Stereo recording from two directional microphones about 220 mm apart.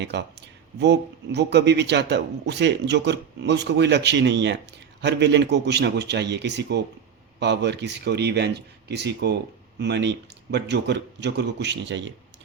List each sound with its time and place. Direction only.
0.0 s speech: 50° right (ahead or behind)